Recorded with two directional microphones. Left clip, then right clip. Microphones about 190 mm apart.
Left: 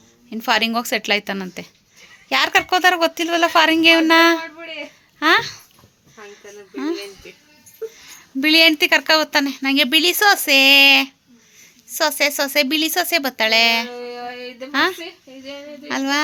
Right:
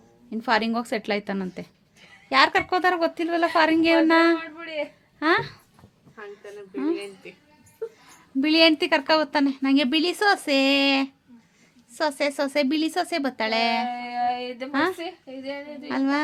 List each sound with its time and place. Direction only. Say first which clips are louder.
0.3 s a woman's voice: left 5 dB; centre (ahead or behind)
6.7 s a woman's voice: left 2 dB; centre (ahead or behind)
14.0 s a sound: right 3 dB; 35° right (ahead or behind)
14.7 s a woman's voice: left 6 dB; centre (ahead or behind)